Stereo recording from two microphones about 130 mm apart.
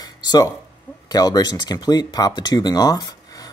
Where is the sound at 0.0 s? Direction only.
30° left (ahead or behind).